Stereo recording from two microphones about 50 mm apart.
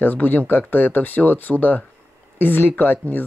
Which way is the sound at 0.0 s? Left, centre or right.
Left.